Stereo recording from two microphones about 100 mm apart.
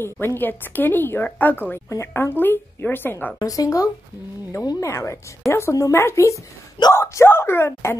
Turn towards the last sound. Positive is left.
turn(degrees=25)  # may be behind; listen again after turning